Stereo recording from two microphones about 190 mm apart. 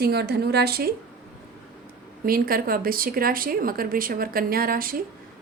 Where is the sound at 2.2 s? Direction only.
50° right (ahead or behind).